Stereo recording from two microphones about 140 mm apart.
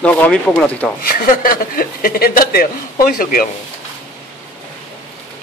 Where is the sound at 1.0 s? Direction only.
90° left.